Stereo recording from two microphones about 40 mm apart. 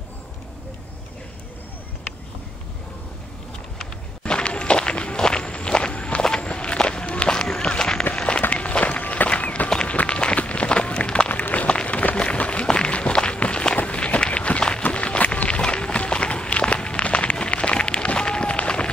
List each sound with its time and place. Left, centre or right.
4.2 s walk: left
8.1 s run: left
9.8 s a sound: left
11.5 s applause: left
12.2 s run: left